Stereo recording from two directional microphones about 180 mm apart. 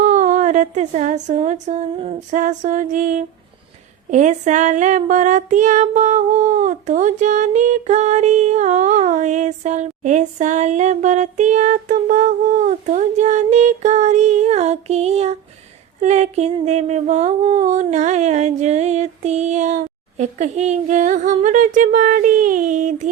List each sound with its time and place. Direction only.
0.0 s a sound: 40° right (ahead or behind)
2.3 s speech: 45° right (ahead or behind)
4.1 s child singing: 40° right (ahead or behind)
21.8 s speech: 45° right (ahead or behind)